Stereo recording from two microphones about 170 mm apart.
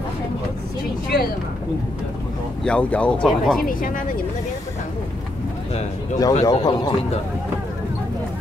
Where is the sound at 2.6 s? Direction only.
5° left (ahead or behind).